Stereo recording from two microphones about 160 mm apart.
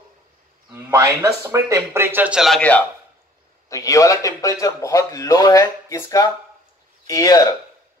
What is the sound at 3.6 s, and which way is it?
A man's voice, 20° left (ahead or behind).